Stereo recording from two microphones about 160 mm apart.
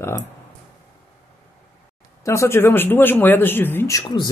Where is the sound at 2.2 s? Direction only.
20° left (ahead or behind).